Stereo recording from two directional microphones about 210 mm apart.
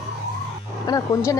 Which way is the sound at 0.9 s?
15° left (ahead or behind).